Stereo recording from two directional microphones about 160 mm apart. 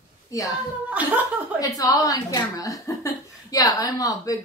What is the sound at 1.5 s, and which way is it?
A woman's voice, 20° left (ahead or behind).